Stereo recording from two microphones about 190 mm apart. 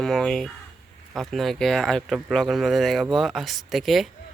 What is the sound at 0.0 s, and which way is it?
Speech, 5° left (ahead or behind).